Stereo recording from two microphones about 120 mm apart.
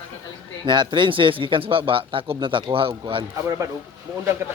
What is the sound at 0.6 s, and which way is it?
Speech, 40° right (ahead or behind).